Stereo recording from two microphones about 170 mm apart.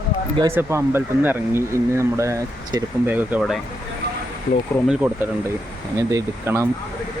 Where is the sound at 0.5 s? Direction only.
15° right (ahead or behind).